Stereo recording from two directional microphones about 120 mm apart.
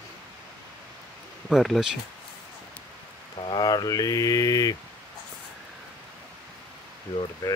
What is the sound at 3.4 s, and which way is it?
Mantra, 35° left (ahead or behind).